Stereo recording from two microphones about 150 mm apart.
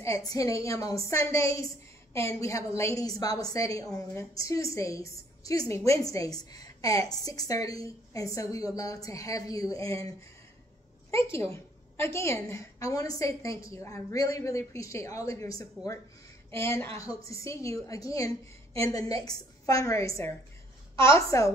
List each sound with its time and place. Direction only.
0.0 s a woman's voice: 25° left (ahead or behind)
11.5 s a woman's voice: 15° left (ahead or behind)